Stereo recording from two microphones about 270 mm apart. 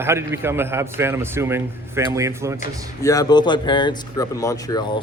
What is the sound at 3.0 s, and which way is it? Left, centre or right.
Speech, centre.